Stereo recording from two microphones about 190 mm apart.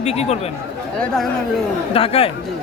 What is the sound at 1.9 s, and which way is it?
Speech, 30° left (ahead or behind).